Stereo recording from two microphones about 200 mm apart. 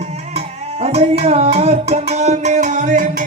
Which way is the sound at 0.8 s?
30° right (ahead or behind).